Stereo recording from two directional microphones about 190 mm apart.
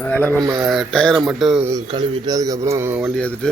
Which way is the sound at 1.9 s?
25° right (ahead or behind).